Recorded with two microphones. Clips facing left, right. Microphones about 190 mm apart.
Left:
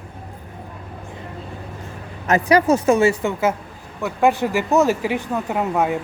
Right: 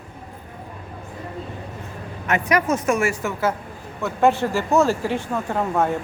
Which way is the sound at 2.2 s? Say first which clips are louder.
Left 5 dB; 35° left (ahead or behind).